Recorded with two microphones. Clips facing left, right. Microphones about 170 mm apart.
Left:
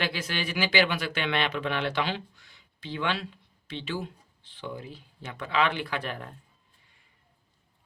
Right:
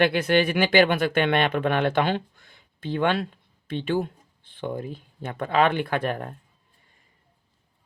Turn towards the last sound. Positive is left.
turn(degrees=-50)  # may be behind; listen again after turning